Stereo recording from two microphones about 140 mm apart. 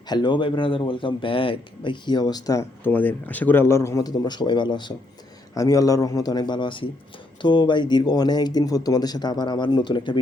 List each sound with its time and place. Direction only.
0.1 s a man's voice: 30° left (ahead or behind)